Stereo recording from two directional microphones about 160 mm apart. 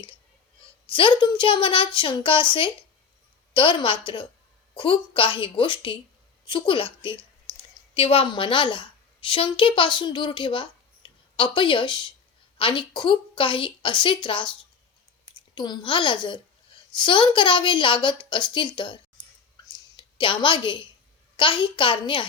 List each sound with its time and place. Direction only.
0.9 s a woman's voice: 30° left (ahead or behind)
19.6 s a sound: 30° left (ahead or behind)
21.3 s a woman's voice: 30° left (ahead or behind)